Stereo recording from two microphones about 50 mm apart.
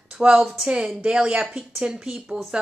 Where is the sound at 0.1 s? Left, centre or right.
Centre.